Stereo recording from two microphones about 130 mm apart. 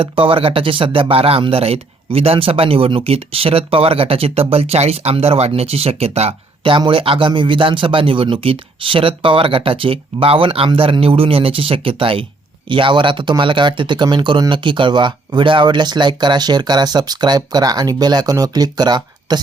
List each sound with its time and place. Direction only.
0.0 s speech: 40° right (ahead or behind)